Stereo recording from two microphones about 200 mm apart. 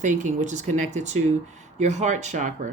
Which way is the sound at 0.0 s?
40° right (ahead or behind).